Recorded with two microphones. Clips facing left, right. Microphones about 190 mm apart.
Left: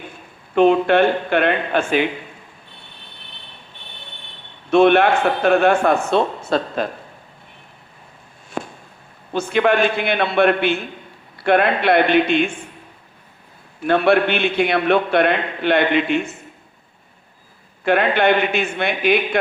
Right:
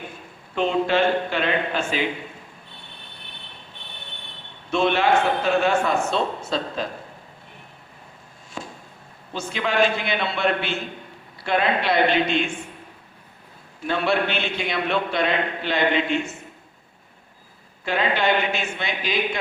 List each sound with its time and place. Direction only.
0.5 s a man's voice: 60° left (ahead or behind)
4.7 s a man's voice: 60° left (ahead or behind)
8.4 s a sound: 55° left (ahead or behind)
9.3 s a man's voice: 60° left (ahead or behind)
13.8 s a man's voice: 60° left (ahead or behind)
17.8 s a man's voice: 60° left (ahead or behind)